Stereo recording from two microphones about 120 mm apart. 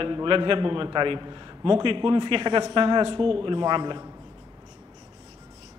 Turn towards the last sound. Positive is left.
turn(degrees=-40)  # may be behind; listen again after turning